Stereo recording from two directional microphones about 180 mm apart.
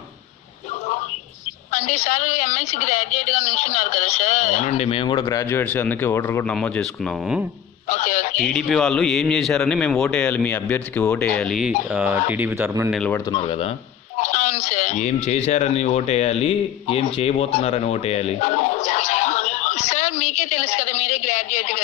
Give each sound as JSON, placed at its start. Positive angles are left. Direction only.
{"t": 1.7, "sound": "a woman's voice", "side_deg": 40}
{"t": 5.5, "sound": "speech", "side_deg": 10}
{"t": 7.9, "sound": "telephone", "side_deg": 45}
{"t": 8.4, "sound": "a man's voice", "side_deg": 5}
{"t": 12.9, "sound": "a man's voice", "side_deg": 5}
{"t": 13.3, "sound": "a woman's voice", "side_deg": 35}
{"t": 14.1, "sound": "a sound", "side_deg": 40}